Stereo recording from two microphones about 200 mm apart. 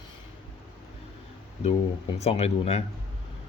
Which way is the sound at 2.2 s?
30° left (ahead or behind).